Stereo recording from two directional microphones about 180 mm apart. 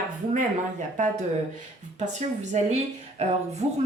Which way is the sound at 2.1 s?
40° right (ahead or behind).